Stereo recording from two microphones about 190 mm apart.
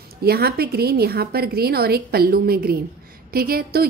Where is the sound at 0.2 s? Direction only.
55° right (ahead or behind).